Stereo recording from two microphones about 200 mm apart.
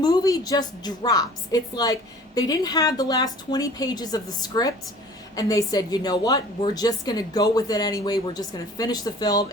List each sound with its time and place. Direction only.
0.0 s a woman's voice: 20° left (ahead or behind)